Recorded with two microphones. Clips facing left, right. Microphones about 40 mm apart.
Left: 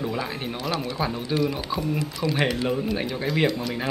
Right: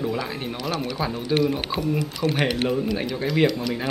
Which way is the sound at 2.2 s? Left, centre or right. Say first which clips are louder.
Right 2 dB; right.